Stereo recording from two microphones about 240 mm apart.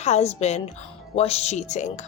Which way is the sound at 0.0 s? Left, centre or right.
Left.